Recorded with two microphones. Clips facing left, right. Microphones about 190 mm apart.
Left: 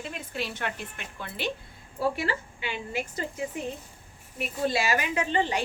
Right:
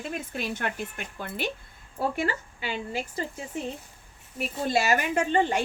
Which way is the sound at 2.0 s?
45° right (ahead or behind).